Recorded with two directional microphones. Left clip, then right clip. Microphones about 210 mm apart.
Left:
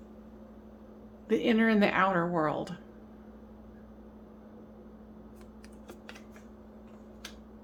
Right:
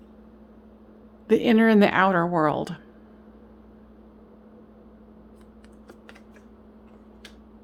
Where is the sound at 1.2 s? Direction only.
50° right (ahead or behind).